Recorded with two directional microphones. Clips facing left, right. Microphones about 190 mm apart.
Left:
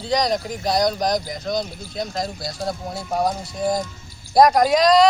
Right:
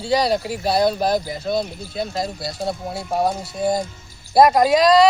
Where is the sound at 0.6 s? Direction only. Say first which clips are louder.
Right 1 dB; 30° right (ahead or behind).